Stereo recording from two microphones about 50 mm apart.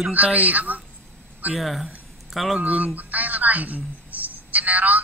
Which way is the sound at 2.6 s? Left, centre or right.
Right.